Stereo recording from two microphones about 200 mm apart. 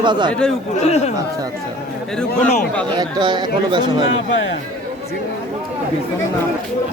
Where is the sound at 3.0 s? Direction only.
20° right (ahead or behind).